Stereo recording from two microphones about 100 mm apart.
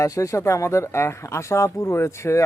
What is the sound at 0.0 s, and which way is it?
Speech, 30° left (ahead or behind).